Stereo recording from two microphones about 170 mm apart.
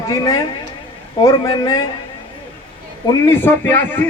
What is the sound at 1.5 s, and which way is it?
Speech, 25° left (ahead or behind).